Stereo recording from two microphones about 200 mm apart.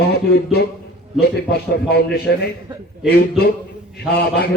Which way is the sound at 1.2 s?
55° left (ahead or behind).